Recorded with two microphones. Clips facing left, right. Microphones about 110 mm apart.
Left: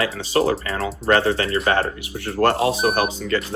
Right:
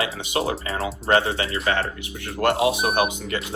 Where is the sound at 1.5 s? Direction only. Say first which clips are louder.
Left 4 dB; 35° left (ahead or behind).